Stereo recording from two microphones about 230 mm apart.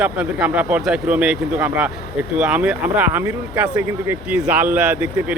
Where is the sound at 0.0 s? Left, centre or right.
Centre.